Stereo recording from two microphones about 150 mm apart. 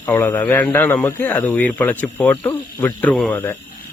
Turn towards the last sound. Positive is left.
turn(degrees=5)  # may be behind; listen again after turning